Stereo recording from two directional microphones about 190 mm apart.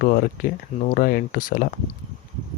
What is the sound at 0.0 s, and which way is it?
Speech, 50° left (ahead or behind).